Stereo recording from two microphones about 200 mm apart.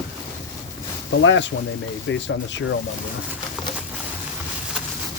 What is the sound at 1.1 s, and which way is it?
Speech, 70° left (ahead or behind).